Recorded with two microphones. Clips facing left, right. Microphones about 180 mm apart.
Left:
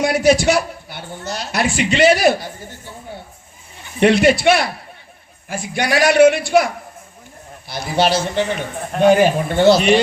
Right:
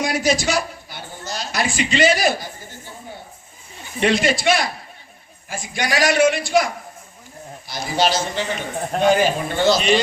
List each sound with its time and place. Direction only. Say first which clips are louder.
0.0 s speech: left 6 dB; 65° left (ahead or behind)
4.0 s a man's voice: left 6 dB; 60° left (ahead or behind)
7.7 s a man's voice: left 3 dB; 60° left (ahead or behind)